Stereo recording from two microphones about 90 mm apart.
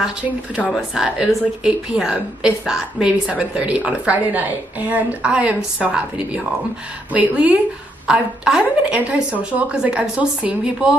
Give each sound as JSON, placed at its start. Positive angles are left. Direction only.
{"t": 0.7, "sound": "a woman's voice", "side_deg": 0}